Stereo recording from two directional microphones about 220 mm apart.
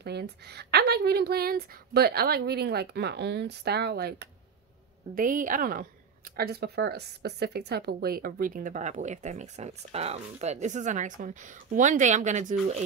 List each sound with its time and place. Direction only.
0.0 s a woman's voice: 50° right (ahead or behind); by 12.8 s 30° right (ahead or behind)